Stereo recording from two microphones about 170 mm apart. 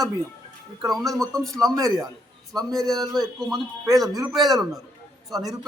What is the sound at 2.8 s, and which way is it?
Speech, 20° right (ahead or behind).